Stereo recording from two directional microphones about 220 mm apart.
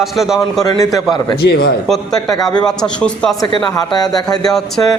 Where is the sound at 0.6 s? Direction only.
15° left (ahead or behind).